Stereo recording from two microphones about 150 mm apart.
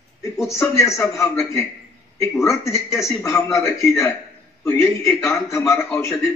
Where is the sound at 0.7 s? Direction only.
20° left (ahead or behind).